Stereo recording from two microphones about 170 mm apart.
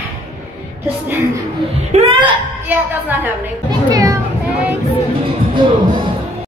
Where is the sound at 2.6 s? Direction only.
10° right (ahead or behind).